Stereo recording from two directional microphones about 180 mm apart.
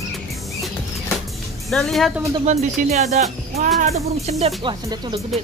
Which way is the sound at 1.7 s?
Centre (ahead or behind).